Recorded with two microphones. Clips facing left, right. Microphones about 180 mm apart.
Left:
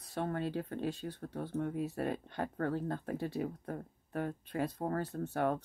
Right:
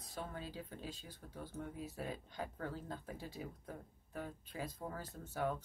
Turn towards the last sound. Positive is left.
turn(degrees=65)  # may be behind; listen again after turning